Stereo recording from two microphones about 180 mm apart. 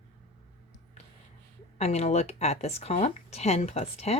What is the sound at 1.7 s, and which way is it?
Speech, 35° left (ahead or behind).